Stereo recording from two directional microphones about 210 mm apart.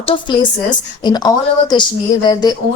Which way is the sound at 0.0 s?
25° left (ahead or behind).